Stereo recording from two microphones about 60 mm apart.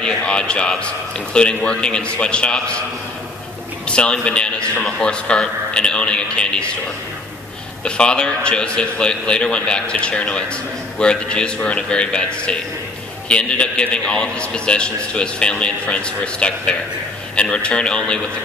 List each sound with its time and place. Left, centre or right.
0.0 s a man's voice: centre
3.8 s a man's voice: centre
7.8 s a man's voice: centre